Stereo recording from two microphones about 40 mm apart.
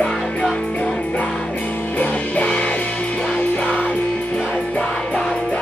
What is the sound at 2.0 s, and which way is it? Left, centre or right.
Music, left.